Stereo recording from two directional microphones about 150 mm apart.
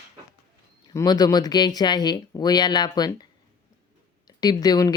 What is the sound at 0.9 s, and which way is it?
A woman's voice, 25° left (ahead or behind).